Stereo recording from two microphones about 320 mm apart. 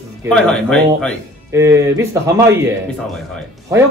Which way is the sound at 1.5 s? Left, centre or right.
Centre.